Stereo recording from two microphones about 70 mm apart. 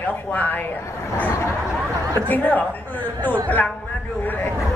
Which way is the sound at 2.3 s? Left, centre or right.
Left.